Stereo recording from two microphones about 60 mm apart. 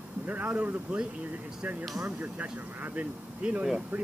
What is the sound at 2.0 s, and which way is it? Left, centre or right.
Speech, right.